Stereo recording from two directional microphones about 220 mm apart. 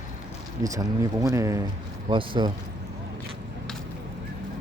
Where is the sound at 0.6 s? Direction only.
15° right (ahead or behind).